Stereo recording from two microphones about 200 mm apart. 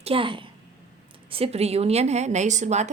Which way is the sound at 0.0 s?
25° right (ahead or behind).